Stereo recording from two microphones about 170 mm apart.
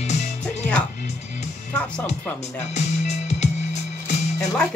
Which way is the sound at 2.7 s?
40° left (ahead or behind).